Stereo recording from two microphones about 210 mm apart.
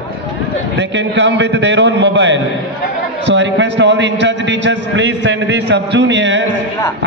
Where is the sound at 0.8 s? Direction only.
60° right (ahead or behind).